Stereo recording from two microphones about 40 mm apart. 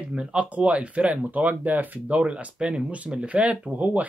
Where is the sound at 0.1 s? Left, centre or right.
Right.